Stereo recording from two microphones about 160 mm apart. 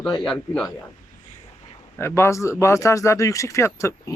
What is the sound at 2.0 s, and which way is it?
Speech, 15° left (ahead or behind).